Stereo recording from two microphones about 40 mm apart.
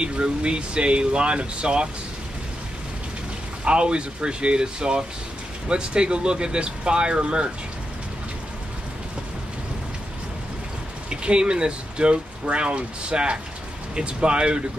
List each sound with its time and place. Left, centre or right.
0.0 s speech: right
3.6 s speech: right
11.1 s speech: right